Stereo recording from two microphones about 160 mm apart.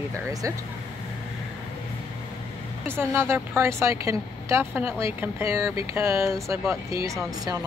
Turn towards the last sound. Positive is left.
turn(degrees=-20)  # may be behind; listen again after turning